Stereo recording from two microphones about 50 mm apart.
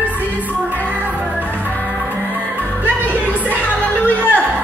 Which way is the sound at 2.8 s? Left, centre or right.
Right.